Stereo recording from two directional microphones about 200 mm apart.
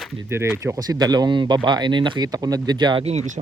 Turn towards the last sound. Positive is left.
turn(degrees=-35)  # may be behind; listen again after turning